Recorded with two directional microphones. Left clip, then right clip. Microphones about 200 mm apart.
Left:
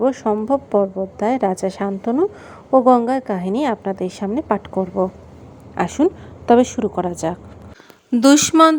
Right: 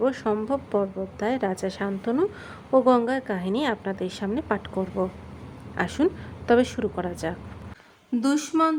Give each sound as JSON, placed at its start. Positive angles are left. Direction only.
{"t": 0.0, "sound": "a woman's voice", "side_deg": 15}
{"t": 8.1, "sound": "a woman's voice", "side_deg": 45}